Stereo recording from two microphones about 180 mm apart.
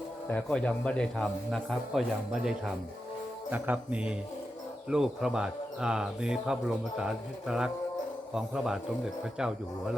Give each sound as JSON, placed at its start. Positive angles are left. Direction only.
{"t": 0.3, "sound": "speech", "side_deg": 10}